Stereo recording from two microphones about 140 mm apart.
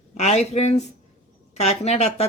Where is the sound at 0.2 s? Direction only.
50° left (ahead or behind).